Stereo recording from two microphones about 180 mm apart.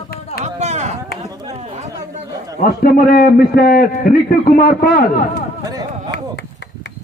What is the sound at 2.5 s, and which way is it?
A man's voice, 55° left (ahead or behind).